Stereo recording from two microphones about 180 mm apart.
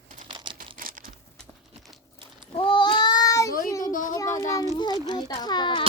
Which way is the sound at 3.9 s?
45° left (ahead or behind).